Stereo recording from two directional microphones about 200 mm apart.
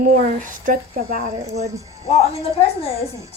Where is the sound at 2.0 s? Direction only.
30° left (ahead or behind).